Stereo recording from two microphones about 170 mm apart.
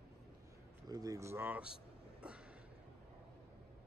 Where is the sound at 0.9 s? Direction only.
20° right (ahead or behind).